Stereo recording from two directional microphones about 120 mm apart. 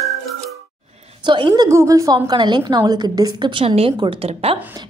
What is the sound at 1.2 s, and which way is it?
Speech, 40° right (ahead or behind).